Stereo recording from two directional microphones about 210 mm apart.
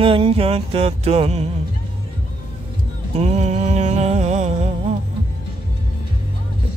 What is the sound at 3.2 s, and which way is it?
Music, 30° right (ahead or behind).